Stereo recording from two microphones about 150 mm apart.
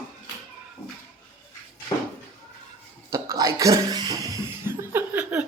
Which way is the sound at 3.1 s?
20° right (ahead or behind).